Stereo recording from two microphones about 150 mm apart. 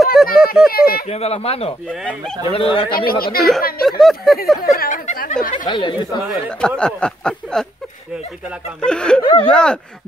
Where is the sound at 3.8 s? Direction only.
Centre (ahead or behind).